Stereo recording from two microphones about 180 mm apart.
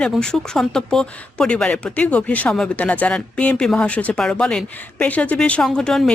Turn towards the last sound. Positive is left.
turn(degrees=5)  # may be behind; listen again after turning